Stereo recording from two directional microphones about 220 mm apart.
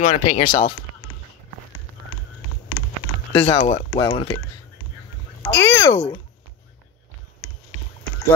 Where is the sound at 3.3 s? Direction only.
30° left (ahead or behind).